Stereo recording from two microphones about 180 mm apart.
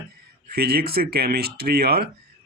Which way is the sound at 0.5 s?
60° right (ahead or behind).